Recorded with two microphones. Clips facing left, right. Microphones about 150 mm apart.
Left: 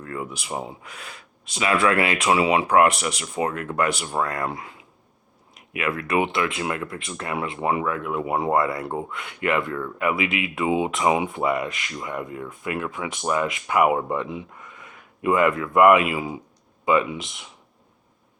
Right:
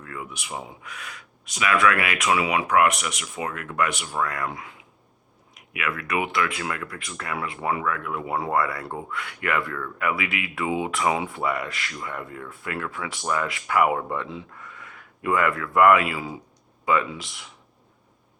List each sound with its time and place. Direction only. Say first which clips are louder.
0.0 s speech: left 5 dB; 35° left (ahead or behind); by 17.5 s 20° left (ahead or behind)